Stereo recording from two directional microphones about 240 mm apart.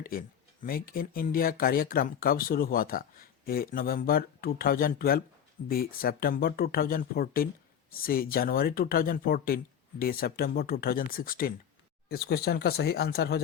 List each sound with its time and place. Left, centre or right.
0.0 s speech: left